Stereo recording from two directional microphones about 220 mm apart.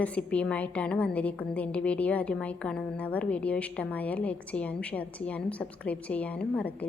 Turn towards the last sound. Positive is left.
turn(degrees=5)  # may be behind; listen again after turning